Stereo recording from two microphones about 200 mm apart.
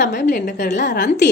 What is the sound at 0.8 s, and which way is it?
Speech, 55° left (ahead or behind).